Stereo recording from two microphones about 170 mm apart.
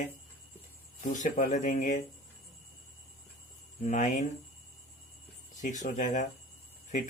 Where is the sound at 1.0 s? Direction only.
50° left (ahead or behind).